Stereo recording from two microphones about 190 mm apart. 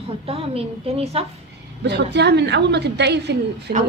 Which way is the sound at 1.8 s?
65° right (ahead or behind).